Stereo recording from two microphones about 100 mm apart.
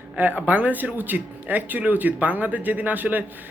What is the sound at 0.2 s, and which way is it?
Speech, 15° right (ahead or behind).